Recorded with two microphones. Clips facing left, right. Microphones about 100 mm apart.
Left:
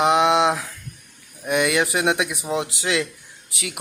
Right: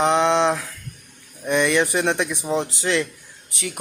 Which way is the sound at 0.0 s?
10° left (ahead or behind).